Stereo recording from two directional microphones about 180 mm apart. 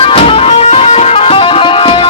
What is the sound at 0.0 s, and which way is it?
Music, 30° left (ahead or behind).